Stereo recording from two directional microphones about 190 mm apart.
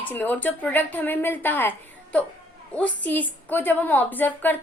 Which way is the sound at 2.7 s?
5° left (ahead or behind).